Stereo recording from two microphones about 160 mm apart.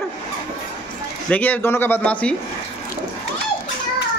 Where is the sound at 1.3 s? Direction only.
10° left (ahead or behind).